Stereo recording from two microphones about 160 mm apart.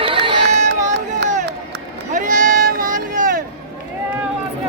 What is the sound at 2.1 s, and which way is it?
Run, 55° right (ahead or behind).